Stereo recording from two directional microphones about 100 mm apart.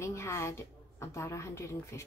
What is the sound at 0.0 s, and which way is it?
A woman's voice, 30° left (ahead or behind).